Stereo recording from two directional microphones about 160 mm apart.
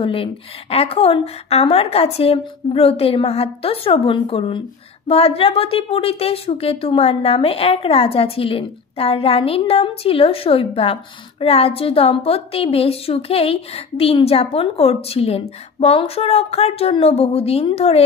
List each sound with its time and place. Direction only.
0.0 s a woman's voice: 35° left (ahead or behind)